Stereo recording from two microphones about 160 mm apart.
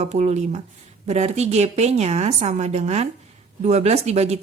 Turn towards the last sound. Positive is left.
turn(degrees=-45)  # may be behind; listen again after turning